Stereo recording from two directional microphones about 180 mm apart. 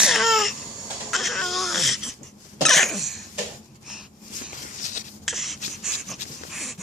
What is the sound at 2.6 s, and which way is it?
Cough, centre (ahead or behind).